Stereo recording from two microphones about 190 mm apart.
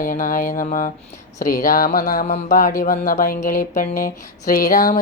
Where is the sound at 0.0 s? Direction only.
45° left (ahead or behind).